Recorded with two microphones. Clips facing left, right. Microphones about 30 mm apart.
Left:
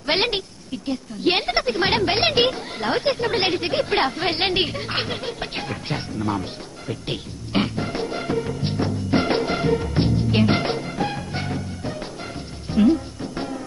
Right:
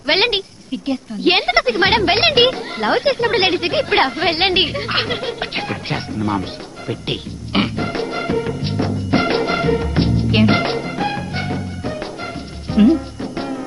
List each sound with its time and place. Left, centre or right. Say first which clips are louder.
0.0 s a woman's voice: right 5 dB; right
6.9 s music: right 5 dB; right